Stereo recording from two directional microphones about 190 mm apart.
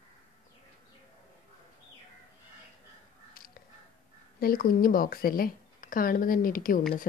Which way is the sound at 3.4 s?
50° left (ahead or behind).